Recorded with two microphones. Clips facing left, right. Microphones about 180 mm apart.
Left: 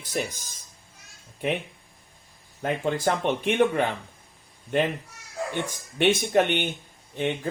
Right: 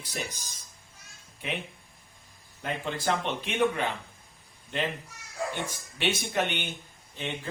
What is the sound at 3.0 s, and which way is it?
Speech, 55° left (ahead or behind).